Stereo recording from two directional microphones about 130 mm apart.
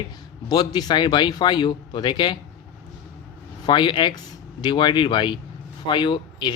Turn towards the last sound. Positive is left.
turn(degrees=35)  # may be behind; listen again after turning